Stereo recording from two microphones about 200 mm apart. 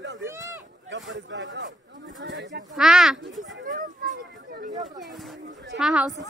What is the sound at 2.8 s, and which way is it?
Speech, centre (ahead or behind).